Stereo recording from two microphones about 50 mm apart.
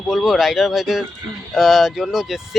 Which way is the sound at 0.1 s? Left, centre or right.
Centre.